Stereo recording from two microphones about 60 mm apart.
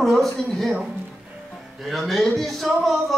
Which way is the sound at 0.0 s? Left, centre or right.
Centre.